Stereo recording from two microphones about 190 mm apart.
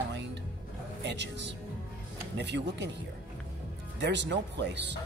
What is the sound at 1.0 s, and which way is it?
Speech, 65° right (ahead or behind).